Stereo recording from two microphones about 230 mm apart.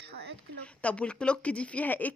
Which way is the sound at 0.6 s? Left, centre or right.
Centre.